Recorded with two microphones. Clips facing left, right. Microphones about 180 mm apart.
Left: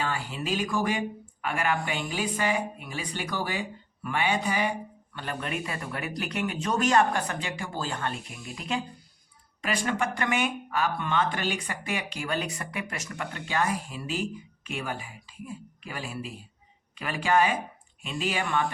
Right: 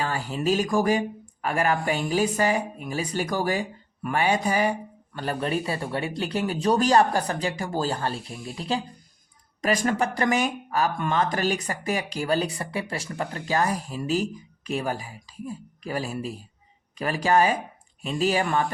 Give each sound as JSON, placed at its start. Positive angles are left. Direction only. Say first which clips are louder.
{"t": 0.0, "sound": "speech", "louder": "right 5 dB", "side_deg": -40}
{"t": 9.6, "sound": "speech", "louder": "right 5 dB", "side_deg": -40}